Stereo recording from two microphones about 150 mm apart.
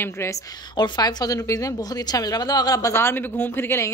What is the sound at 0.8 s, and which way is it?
A woman's voice, 25° left (ahead or behind).